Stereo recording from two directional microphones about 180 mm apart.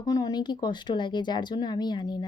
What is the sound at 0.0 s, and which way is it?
A woman's voice, 20° left (ahead or behind).